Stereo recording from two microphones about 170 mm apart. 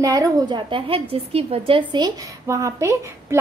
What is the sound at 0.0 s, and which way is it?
A woman's voice, 20° right (ahead or behind).